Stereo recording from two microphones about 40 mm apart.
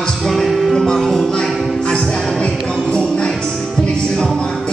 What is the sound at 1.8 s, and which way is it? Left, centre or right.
Music, centre.